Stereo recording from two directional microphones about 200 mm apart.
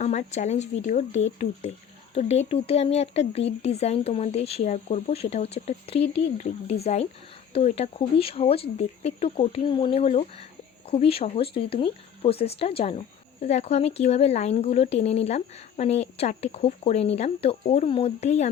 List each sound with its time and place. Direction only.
0.0 s speech: 35° left (ahead or behind)